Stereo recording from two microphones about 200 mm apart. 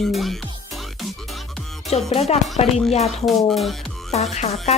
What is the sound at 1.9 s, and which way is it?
Speech, 30° left (ahead or behind).